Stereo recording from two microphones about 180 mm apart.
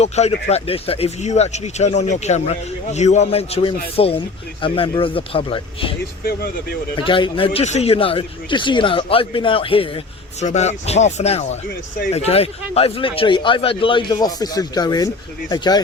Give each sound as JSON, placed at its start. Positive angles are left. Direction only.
{"t": 0.0, "sound": "speech", "side_deg": 35}
{"t": 6.2, "sound": "speech", "side_deg": 60}
{"t": 6.9, "sound": "speech", "side_deg": 30}